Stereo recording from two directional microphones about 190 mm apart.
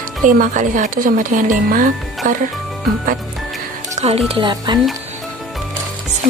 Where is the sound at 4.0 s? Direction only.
30° right (ahead or behind).